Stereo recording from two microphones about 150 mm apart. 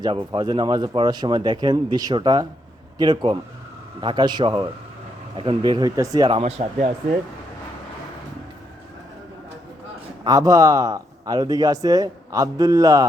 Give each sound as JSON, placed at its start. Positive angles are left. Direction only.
{"t": 0.0, "sound": "speech", "side_deg": -30}
{"t": 6.4, "sound": "speech", "side_deg": -45}
{"t": 10.2, "sound": "speech", "side_deg": -25}